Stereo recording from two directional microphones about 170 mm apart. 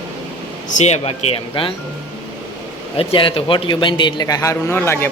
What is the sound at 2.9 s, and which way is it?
A man's voice, 35° left (ahead or behind).